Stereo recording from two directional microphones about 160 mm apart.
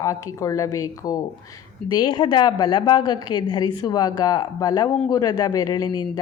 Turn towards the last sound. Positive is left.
turn(degrees=25)  # may be behind; listen again after turning